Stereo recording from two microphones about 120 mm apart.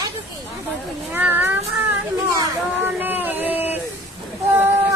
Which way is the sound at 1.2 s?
15° right (ahead or behind).